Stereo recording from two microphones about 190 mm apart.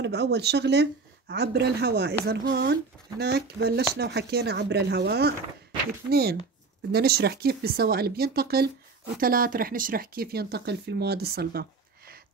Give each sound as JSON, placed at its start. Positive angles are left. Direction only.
{"t": 0.0, "sound": "speech", "side_deg": -60}